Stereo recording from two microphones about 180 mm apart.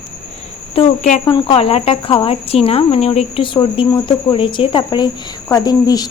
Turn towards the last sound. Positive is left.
turn(degrees=20)  # may be behind; listen again after turning